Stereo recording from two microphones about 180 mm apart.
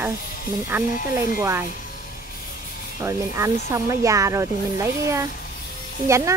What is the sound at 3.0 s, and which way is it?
Speech, 15° right (ahead or behind).